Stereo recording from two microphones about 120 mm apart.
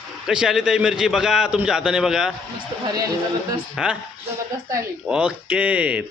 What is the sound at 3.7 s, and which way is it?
Speech, 5° right (ahead or behind).